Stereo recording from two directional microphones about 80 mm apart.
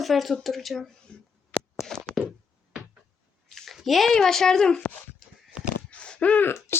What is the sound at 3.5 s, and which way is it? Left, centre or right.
Speech, centre.